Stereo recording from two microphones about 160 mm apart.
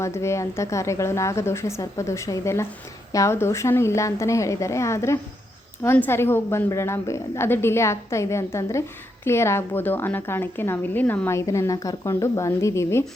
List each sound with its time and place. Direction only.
0.0 s a woman's voice: 15° left (ahead or behind)